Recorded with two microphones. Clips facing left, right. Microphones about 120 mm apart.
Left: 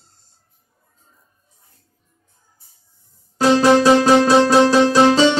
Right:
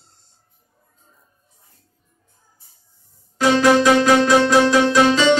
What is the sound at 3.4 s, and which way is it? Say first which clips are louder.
Music: left 2 dB; 35° left (ahead or behind).